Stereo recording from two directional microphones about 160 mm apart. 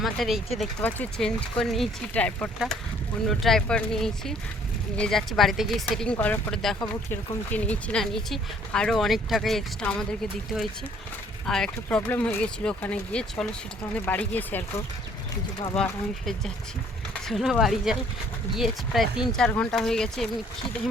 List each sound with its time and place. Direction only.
0.0 s speech: centre (ahead or behind)
15.7 s speech: 5° left (ahead or behind)